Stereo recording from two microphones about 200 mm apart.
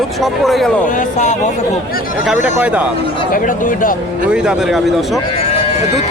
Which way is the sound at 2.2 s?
5° right (ahead or behind).